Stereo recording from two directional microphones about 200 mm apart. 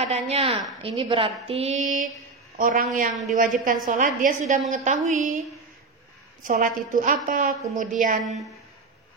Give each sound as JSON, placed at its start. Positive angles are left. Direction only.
{"t": 0.1, "sound": "a woman's voice", "side_deg": -30}
{"t": 6.4, "sound": "a woman's voice", "side_deg": -40}